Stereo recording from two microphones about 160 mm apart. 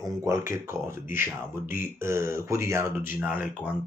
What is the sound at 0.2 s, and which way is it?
Speech, 15° right (ahead or behind).